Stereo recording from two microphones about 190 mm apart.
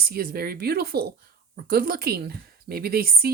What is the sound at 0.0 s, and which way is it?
Speech, 50° right (ahead or behind).